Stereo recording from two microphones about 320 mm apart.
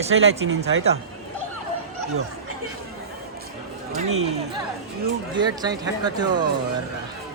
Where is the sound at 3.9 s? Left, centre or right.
Right.